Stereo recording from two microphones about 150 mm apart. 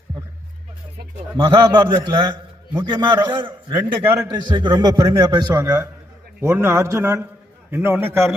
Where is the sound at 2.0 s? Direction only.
30° right (ahead or behind).